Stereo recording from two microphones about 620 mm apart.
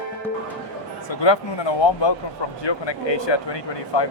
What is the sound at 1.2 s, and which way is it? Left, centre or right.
Speech, left.